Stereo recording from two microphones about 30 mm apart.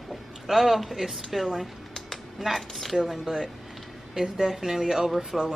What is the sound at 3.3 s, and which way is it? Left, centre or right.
Speech, centre.